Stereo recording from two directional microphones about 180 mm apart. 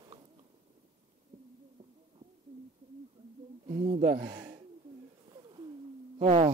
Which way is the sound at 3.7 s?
35° right (ahead or behind).